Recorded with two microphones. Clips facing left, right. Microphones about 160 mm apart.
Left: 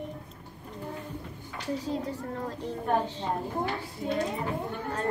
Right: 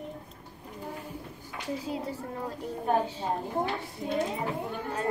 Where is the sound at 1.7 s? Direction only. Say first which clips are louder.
Left 2 dB; 10° right (ahead or behind).